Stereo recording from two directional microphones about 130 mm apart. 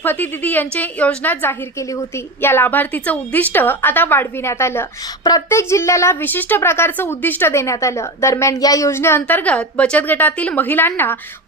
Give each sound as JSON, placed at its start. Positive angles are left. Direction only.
{"t": 0.0, "sound": "a woman's voice", "side_deg": 15}